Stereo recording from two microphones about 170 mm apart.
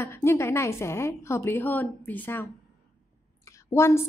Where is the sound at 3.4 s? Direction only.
15° left (ahead or behind).